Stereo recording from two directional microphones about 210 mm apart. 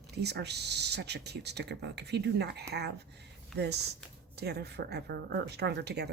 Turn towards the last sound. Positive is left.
turn(degrees=-50)  # may be behind; listen again after turning